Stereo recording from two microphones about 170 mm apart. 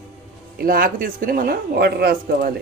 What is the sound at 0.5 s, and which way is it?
Speech, 60° right (ahead or behind).